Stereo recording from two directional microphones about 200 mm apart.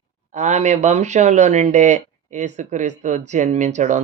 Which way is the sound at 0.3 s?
35° right (ahead or behind).